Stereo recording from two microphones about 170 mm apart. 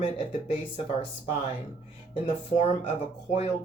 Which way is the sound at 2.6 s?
40° left (ahead or behind).